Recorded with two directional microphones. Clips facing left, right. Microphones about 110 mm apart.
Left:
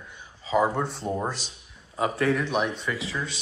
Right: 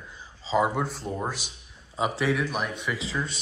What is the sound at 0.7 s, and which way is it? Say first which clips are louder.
Speech: left 1 dB; 5° right (ahead or behind).